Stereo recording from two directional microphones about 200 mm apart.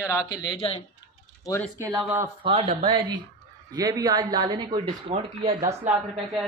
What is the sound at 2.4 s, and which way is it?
Speech, 30° right (ahead or behind).